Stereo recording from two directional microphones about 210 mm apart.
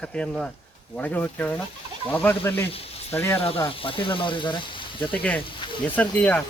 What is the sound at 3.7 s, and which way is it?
Speech, 25° left (ahead or behind).